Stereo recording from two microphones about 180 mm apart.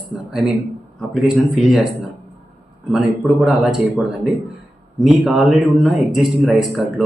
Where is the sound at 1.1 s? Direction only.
Centre (ahead or behind).